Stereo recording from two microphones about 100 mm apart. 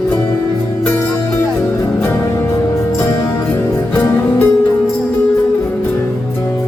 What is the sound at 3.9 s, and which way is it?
Music, 20° left (ahead or behind).